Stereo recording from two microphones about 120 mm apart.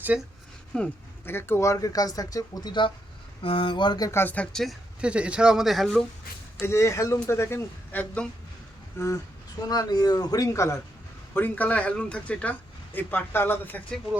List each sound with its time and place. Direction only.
0.1 s speech: 10° right (ahead or behind)
0.7 s speech: 10° left (ahead or behind)
1.2 s speech: 20° left (ahead or behind); by 2.9 s 40° left (ahead or behind)
3.4 s speech: 50° left (ahead or behind)
4.1 s speech: 15° left (ahead or behind)
4.5 s speech: centre (ahead or behind)
6.6 s a man's voice: 25° left (ahead or behind)